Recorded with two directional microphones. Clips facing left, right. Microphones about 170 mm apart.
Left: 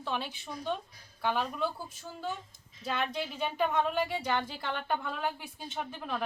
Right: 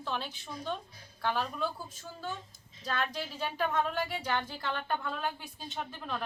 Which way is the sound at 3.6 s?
20° left (ahead or behind).